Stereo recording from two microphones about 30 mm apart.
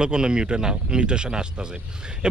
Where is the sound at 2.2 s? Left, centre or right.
Right.